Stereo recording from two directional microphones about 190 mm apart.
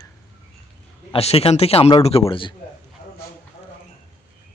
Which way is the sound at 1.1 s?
30° left (ahead or behind).